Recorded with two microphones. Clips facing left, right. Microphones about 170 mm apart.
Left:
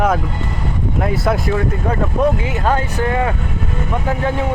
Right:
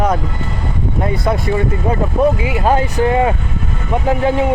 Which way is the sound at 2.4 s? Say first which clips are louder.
Right 3 dB; 15° right (ahead or behind).